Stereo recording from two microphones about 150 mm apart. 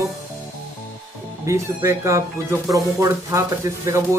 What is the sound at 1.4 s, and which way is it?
Speech, 20° right (ahead or behind).